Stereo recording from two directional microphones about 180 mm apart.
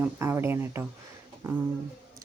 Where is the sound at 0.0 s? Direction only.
15° right (ahead or behind).